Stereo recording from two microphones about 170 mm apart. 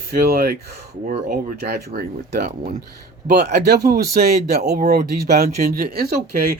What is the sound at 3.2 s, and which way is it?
A man's voice, 75° right (ahead or behind).